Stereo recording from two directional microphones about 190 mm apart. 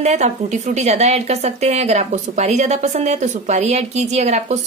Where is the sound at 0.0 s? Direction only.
35° right (ahead or behind).